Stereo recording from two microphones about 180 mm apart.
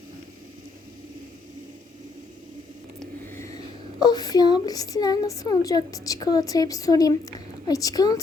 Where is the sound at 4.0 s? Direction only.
20° left (ahead or behind).